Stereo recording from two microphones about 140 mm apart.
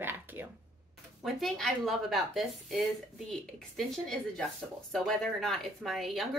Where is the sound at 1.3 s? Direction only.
Centre (ahead or behind).